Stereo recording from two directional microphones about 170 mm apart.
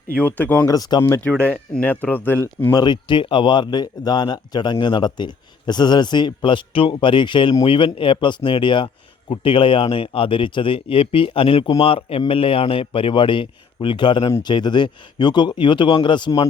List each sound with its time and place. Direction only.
0.2 s speech: 10° left (ahead or behind)
1.0 s speech: 10° left (ahead or behind)
2.8 s speech: 30° left (ahead or behind)